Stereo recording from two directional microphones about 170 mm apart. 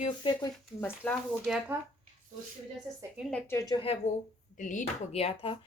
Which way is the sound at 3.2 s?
Centre (ahead or behind).